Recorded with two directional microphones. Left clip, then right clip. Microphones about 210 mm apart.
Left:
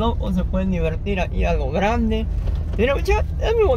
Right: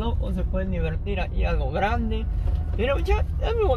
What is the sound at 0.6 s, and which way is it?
Speech, 30° left (ahead or behind).